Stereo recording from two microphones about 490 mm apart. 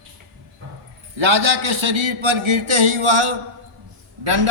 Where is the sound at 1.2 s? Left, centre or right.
Right.